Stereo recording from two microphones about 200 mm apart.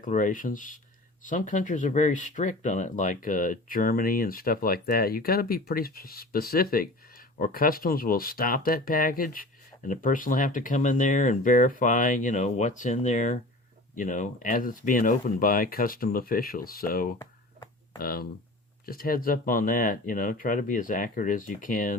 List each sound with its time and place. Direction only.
0.0 s speech: 40° left (ahead or behind)